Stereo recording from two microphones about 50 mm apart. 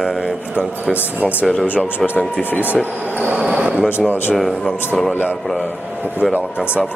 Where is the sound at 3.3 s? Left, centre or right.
Centre.